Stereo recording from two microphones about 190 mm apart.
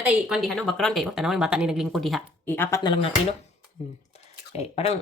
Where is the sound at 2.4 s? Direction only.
10° left (ahead or behind).